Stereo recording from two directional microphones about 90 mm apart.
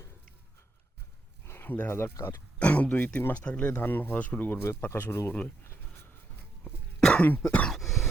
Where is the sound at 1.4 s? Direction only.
25° left (ahead or behind).